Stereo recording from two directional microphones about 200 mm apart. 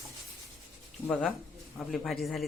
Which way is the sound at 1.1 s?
Centre (ahead or behind).